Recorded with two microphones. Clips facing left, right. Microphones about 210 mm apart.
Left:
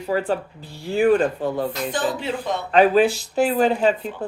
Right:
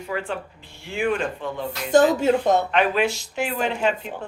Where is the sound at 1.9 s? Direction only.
45° right (ahead or behind).